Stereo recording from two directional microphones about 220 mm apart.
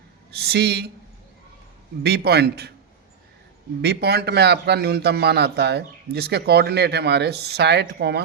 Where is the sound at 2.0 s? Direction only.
45° right (ahead or behind).